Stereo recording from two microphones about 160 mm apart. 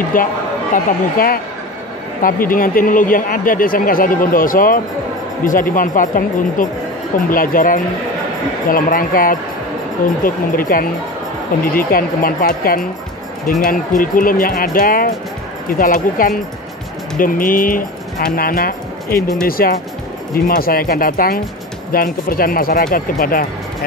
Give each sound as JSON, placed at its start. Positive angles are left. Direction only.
{"t": 0.1, "sound": "speech", "side_deg": 60}